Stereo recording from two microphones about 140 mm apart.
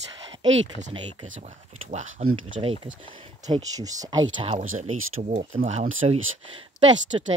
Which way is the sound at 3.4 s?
25° right (ahead or behind).